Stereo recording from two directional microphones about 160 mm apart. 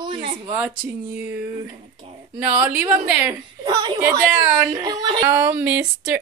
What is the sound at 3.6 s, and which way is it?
A woman's voice, 25° right (ahead or behind).